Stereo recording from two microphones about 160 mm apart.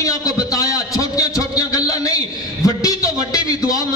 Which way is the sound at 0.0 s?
20° left (ahead or behind).